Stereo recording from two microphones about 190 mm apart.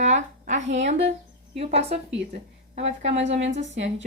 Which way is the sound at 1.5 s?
35° right (ahead or behind).